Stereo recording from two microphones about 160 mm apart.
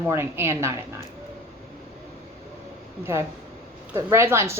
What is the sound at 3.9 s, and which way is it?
Speech, 15° right (ahead or behind).